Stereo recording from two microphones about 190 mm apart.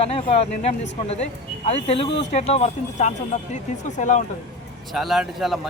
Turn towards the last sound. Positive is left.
turn(degrees=0)  # may be behind; listen again after turning